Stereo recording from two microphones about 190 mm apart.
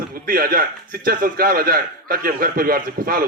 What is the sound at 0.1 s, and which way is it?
A man's voice, 50° right (ahead or behind).